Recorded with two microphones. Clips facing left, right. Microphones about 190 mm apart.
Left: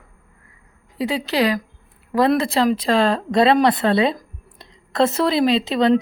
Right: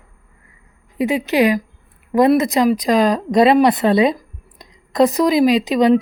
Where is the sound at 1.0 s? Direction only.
20° right (ahead or behind).